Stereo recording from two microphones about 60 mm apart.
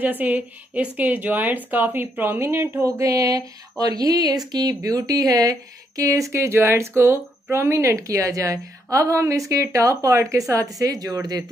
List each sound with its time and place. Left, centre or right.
0.0 s a woman's voice: right
2.4 s a woman's voice: right
2.8 s speech: right
10.6 s speech: right